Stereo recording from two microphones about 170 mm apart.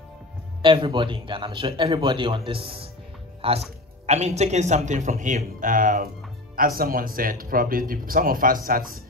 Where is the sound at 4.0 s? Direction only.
40° right (ahead or behind).